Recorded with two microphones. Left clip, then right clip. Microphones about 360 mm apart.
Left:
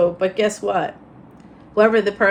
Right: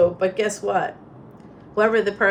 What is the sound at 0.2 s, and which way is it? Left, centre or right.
A woman's voice, centre.